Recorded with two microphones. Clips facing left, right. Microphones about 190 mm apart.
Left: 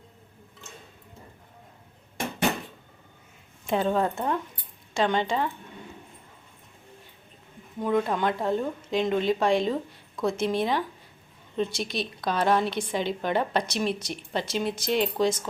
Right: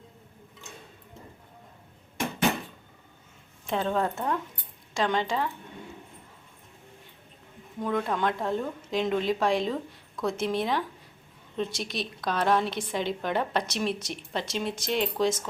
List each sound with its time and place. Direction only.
3.7 s a woman's voice: 5° left (ahead or behind)
7.8 s a woman's voice: 5° left (ahead or behind)